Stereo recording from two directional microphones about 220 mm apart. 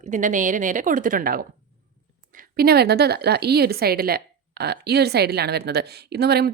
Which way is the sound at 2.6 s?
45° right (ahead or behind).